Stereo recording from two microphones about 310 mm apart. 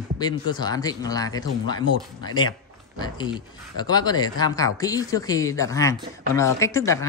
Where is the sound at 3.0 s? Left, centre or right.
Centre.